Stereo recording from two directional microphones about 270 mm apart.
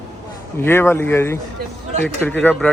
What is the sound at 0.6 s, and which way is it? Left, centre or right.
Speech, centre.